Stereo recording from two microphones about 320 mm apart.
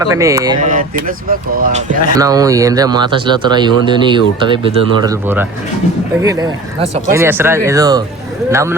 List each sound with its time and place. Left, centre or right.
0.1 s speech: centre
0.6 s speech: right
2.1 s speech: centre